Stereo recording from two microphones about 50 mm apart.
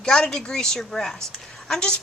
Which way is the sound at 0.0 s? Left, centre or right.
Centre.